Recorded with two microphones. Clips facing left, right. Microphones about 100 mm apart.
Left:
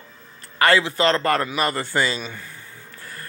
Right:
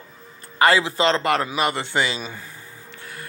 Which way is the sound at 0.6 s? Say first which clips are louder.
Even; 25° right (ahead or behind).